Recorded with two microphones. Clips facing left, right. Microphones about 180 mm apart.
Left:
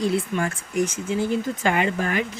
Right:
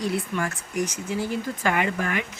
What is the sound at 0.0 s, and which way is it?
Speech, 25° left (ahead or behind).